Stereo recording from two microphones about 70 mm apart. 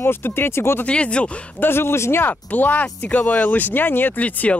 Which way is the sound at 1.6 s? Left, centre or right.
Left.